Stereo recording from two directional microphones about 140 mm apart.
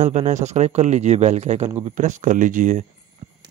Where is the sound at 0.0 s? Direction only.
60° right (ahead or behind).